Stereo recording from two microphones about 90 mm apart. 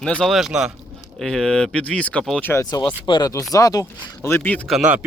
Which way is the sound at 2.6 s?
50° left (ahead or behind).